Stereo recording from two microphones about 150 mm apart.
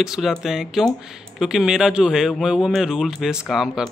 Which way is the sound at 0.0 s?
Centre (ahead or behind).